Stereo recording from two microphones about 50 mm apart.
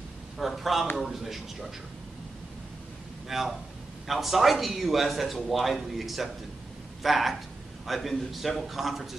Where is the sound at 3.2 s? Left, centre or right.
Centre.